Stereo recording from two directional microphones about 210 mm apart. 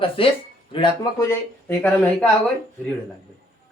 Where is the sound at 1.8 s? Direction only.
5° left (ahead or behind).